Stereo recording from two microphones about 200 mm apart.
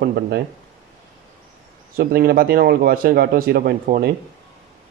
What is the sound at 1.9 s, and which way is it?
A man's voice, 45° right (ahead or behind).